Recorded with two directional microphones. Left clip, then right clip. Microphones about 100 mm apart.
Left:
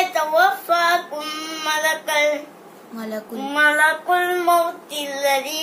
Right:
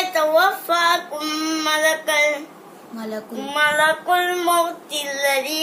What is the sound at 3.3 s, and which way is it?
Child singing, 35° right (ahead or behind).